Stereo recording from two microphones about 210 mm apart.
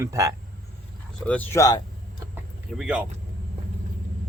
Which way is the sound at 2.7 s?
5° right (ahead or behind).